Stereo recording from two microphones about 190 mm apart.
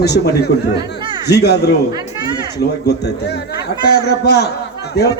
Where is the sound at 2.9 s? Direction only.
60° left (ahead or behind).